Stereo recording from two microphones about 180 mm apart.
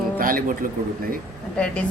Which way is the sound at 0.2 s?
50° right (ahead or behind).